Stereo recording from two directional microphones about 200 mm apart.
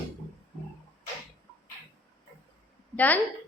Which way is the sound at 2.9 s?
10° left (ahead or behind).